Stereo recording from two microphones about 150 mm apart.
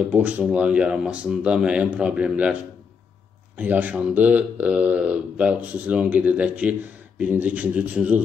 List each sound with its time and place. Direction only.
0.1 s speech: 10° right (ahead or behind)
3.5 s speech: 10° right (ahead or behind)